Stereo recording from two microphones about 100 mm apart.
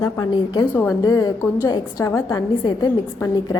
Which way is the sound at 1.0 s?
35° left (ahead or behind).